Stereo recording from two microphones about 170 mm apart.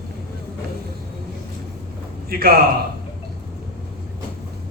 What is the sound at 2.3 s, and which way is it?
Speech, 60° right (ahead or behind).